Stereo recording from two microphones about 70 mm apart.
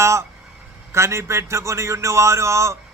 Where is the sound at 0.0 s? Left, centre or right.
Right.